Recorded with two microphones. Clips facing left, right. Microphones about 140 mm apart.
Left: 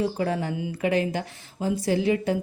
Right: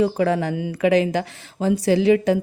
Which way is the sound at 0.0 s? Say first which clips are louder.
Right 6 dB; 90° right.